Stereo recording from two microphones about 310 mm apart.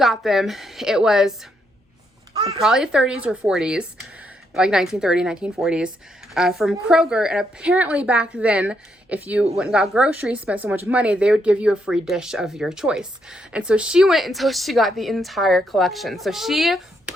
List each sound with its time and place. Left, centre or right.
0.0 s a woman's voice: centre
2.3 s a sound: centre
2.6 s a woman's voice: centre